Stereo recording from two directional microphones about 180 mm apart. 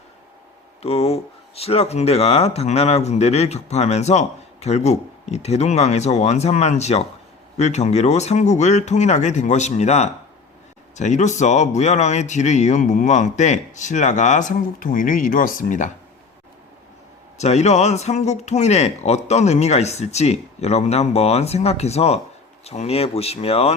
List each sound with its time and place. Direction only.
0.8 s speech: 35° left (ahead or behind)
17.3 s speech: 40° left (ahead or behind)